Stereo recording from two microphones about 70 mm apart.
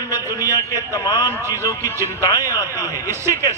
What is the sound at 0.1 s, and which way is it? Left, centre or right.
A man's voice, left.